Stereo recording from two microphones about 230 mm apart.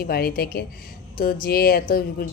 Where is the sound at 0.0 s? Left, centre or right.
Left.